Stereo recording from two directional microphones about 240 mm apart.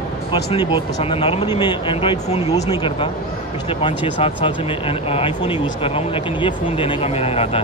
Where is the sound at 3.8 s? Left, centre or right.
Centre.